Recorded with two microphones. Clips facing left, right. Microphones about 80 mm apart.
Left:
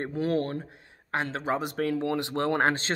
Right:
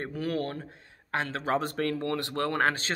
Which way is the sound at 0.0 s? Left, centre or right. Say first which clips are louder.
Left 4 dB; left.